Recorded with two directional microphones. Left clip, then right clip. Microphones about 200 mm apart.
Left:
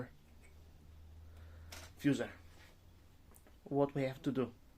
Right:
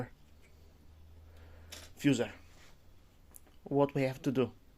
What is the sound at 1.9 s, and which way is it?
Speech, 45° right (ahead or behind).